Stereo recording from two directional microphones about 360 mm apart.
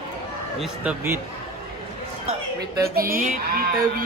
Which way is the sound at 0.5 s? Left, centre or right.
Centre.